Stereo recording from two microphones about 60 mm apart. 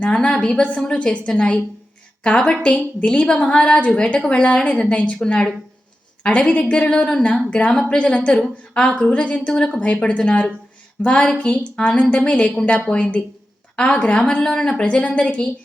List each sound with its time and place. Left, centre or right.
0.0 s a woman's voice: centre